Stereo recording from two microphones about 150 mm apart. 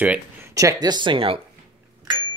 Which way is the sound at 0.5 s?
20° right (ahead or behind).